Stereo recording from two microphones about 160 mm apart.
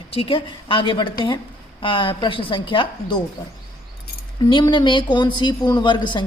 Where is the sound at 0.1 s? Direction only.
35° left (ahead or behind).